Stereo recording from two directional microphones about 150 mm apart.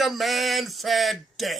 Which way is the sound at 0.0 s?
Centre (ahead or behind).